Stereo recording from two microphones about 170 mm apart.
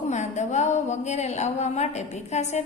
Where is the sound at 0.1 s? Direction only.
45° left (ahead or behind).